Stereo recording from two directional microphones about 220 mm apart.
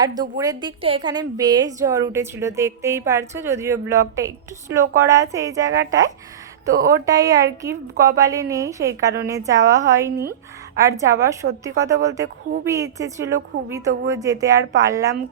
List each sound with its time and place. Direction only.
0.2 s a woman's voice: 15° right (ahead or behind)
6.7 s speech: 40° right (ahead or behind)
7.0 s a woman's voice: 15° right (ahead or behind)